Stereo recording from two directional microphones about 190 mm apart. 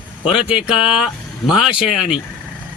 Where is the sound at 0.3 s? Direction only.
5° right (ahead or behind).